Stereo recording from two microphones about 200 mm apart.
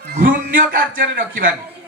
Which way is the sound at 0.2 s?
45° right (ahead or behind).